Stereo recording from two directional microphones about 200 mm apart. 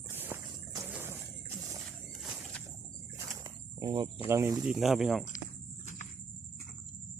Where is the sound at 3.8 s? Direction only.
20° right (ahead or behind).